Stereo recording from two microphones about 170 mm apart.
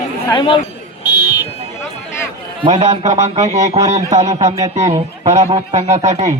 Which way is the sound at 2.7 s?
45° right (ahead or behind).